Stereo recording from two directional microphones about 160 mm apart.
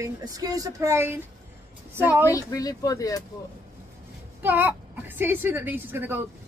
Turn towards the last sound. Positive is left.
turn(degrees=-10)  # may be behind; listen again after turning